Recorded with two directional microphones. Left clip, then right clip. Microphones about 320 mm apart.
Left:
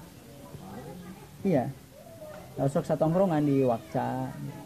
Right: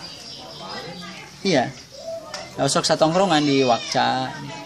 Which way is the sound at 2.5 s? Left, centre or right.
Centre.